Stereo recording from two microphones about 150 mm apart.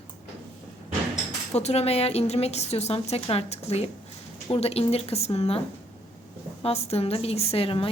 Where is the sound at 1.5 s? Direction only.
45° left (ahead or behind).